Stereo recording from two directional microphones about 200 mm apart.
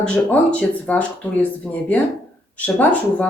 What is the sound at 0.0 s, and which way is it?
Speech, 5° left (ahead or behind).